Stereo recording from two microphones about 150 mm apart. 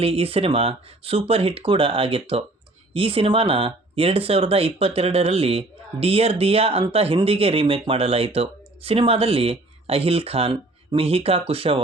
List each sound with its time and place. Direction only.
0.0 s speech: 40° right (ahead or behind)